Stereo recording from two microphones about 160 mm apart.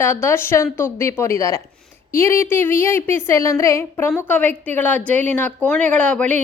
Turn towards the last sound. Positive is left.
turn(degrees=10)  # may be behind; listen again after turning